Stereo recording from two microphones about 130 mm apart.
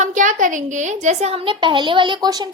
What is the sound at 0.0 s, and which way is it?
A woman's voice, 75° right (ahead or behind).